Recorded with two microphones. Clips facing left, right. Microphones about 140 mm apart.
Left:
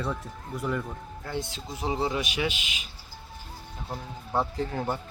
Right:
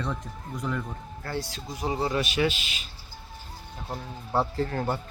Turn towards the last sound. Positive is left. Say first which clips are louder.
# right 2 dB
turn(degrees=15)  # may be behind; listen again after turning